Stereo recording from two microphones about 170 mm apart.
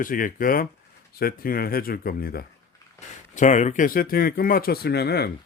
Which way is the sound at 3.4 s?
45° left (ahead or behind).